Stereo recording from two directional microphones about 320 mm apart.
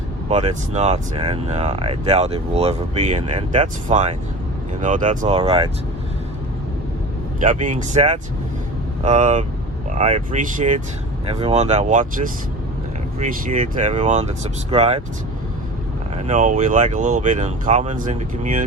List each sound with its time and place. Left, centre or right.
0.3 s speech: right
7.4 s speech: right
13.1 s speech: right
16.1 s speech: right